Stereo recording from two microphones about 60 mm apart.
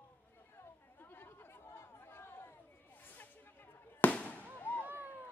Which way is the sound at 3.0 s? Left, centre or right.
Left.